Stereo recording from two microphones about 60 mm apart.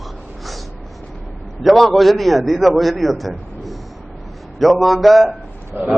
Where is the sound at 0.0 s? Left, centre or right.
Centre.